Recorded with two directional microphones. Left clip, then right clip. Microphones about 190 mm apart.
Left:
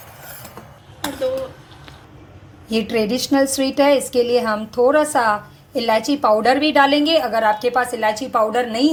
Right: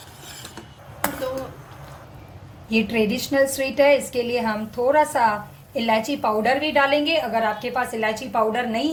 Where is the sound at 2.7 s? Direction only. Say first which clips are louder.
Left 2 dB; 15° left (ahead or behind).